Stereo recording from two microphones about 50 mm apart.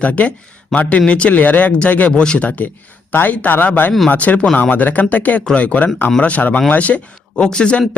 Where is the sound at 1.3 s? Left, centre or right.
Left.